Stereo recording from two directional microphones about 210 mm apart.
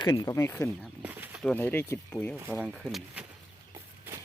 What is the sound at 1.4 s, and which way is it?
Speech, 5° left (ahead or behind).